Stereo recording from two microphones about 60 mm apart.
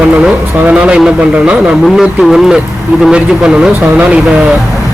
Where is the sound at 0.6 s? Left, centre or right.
Centre.